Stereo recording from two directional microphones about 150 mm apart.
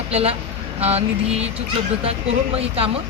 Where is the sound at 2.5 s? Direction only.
40° right (ahead or behind).